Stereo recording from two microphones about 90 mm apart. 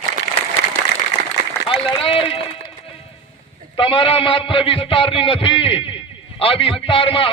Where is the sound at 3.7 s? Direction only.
70° left (ahead or behind).